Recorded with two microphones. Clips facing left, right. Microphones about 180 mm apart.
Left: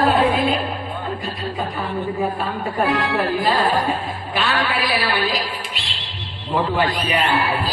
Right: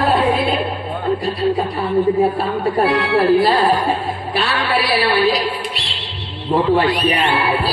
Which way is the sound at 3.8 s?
35° right (ahead or behind).